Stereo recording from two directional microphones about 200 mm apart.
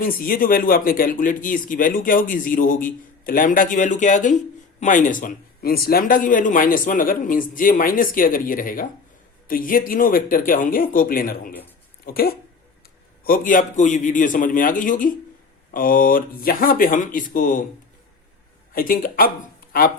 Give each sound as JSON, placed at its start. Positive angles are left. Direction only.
{"t": 0.0, "sound": "a man's voice", "side_deg": 45}
{"t": 18.7, "sound": "speech", "side_deg": 45}